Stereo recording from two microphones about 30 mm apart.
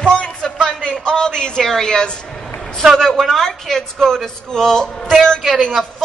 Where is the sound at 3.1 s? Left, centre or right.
Centre.